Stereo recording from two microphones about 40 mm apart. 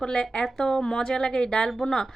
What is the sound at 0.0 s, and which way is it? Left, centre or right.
A woman's voice, centre.